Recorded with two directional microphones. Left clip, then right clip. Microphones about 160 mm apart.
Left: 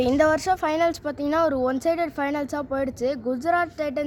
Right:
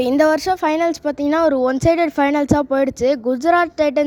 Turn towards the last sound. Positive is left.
turn(degrees=-55)  # may be behind; listen again after turning